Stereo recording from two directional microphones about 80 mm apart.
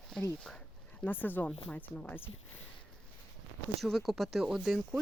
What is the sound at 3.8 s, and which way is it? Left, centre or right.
Speech, centre.